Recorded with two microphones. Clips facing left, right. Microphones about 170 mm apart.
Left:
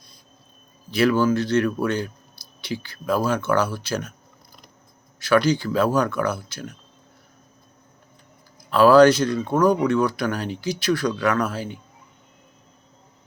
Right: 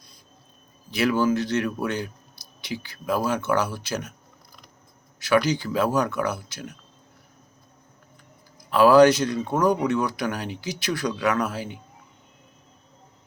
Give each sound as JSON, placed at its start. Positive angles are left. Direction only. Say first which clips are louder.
{"t": 0.9, "sound": "speech", "louder": "left 3 dB", "side_deg": -15}
{"t": 5.2, "sound": "speech", "louder": "left 3 dB", "side_deg": -15}
{"t": 8.7, "sound": "speech", "louder": "left 2 dB", "side_deg": -15}